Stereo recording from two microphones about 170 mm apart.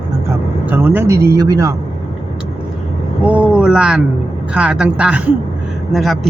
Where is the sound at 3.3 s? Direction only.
10° right (ahead or behind).